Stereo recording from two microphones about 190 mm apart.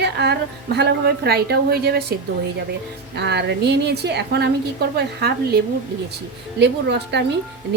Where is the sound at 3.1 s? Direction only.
60° right (ahead or behind).